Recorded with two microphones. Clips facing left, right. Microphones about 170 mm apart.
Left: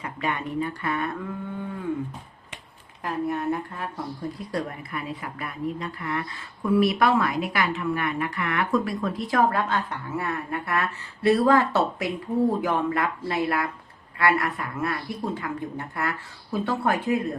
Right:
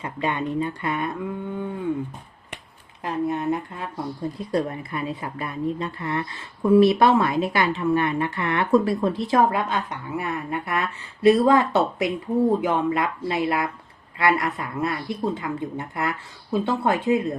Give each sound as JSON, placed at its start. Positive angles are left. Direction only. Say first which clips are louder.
{"t": 0.0, "sound": "a woman's voice", "louder": "right 3 dB", "side_deg": -25}
{"t": 3.0, "sound": "a woman's voice", "louder": "right 2 dB", "side_deg": -20}